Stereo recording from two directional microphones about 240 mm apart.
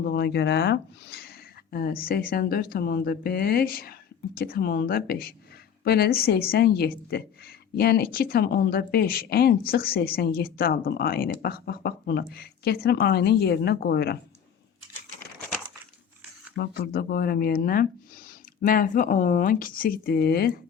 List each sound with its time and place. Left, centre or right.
0.0 s a woman's voice: left
16.6 s a woman's voice: left